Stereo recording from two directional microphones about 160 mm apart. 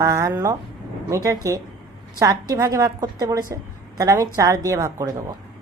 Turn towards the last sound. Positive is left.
turn(degrees=-20)  # may be behind; listen again after turning